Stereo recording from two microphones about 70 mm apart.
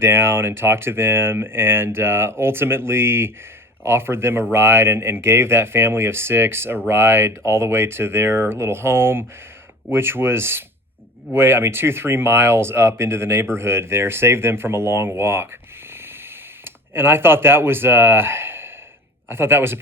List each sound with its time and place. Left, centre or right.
0.0 s speech: right
16.6 s speech: right